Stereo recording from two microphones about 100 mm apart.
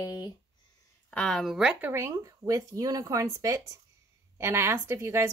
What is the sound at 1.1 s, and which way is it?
Speech, 5° left (ahead or behind).